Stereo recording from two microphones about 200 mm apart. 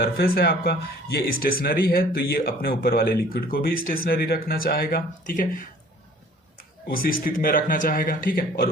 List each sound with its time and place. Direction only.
0.0 s speech: 50° left (ahead or behind)
6.8 s speech: 45° left (ahead or behind)